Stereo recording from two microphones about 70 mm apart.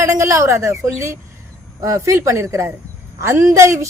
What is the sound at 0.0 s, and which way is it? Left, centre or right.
A woman's voice, right.